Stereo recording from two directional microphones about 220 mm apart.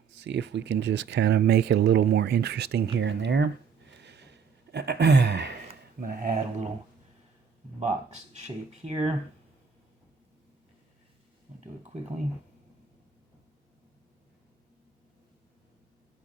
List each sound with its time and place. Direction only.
0.2 s speech: 50° right (ahead or behind)
3.0 s a sound: 55° right (ahead or behind)
6.0 s speech: 40° right (ahead or behind)
7.8 s speech: 30° right (ahead or behind)